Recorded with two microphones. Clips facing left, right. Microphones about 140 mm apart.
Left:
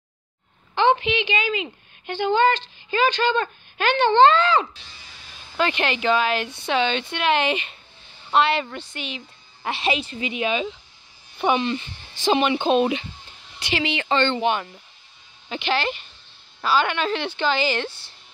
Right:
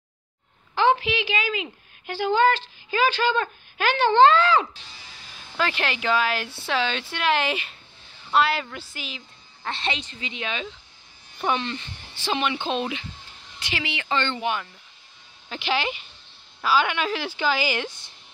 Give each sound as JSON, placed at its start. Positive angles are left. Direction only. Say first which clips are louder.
{"t": 0.7, "sound": "a woman's voice", "louder": "left 2 dB", "side_deg": -5}
{"t": 9.6, "sound": "a woman's voice", "louder": "left 5 dB", "side_deg": 10}
{"t": 15.6, "sound": "a woman's voice", "louder": "left 2 dB", "side_deg": -10}